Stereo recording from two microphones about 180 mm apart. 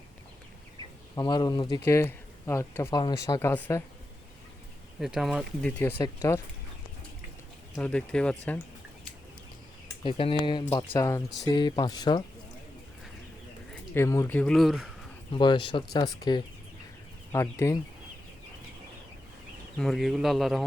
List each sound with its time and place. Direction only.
1.1 s speech: 25° left (ahead or behind)
4.9 s speech: centre (ahead or behind)
6.0 s speech: 15° left (ahead or behind)
7.8 s speech: 5° left (ahead or behind)
10.0 s speech: 30° left (ahead or behind)
13.9 s speech: 15° left (ahead or behind); by 14.8 s centre (ahead or behind)
15.3 s speech: 25° left (ahead or behind)
19.8 s speech: centre (ahead or behind)